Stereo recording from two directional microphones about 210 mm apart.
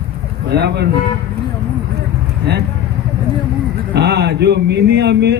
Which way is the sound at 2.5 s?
55° right (ahead or behind).